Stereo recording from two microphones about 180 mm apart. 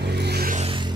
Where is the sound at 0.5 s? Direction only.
30° right (ahead or behind).